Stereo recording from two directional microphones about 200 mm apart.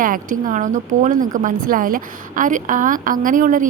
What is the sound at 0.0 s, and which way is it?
Speech, 45° right (ahead or behind).